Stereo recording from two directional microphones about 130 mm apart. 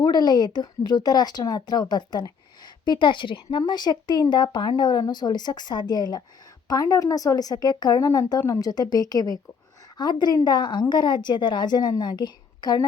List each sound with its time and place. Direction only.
0.0 s a woman's voice: 35° left (ahead or behind)